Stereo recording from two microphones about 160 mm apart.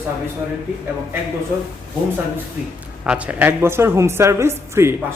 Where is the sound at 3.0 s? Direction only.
10° right (ahead or behind).